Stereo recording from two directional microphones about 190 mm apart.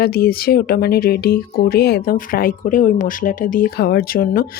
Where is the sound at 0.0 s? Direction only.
55° left (ahead or behind).